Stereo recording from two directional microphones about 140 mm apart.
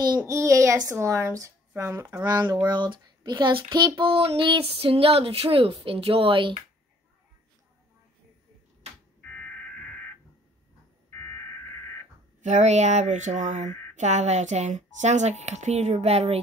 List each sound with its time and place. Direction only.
0.2 s speech: 20° right (ahead or behind); by 6.6 s 40° right (ahead or behind)
9.2 s crow: 10° left (ahead or behind)
11.1 s a sound: 15° left (ahead or behind)
12.4 s speech: 55° right (ahead or behind)